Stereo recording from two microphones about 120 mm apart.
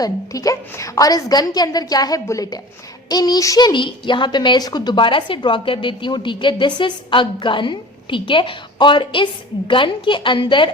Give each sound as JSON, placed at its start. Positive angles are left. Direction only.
{"t": 0.0, "sound": "a woman's voice", "side_deg": 30}
{"t": 3.7, "sound": "a woman's voice", "side_deg": 40}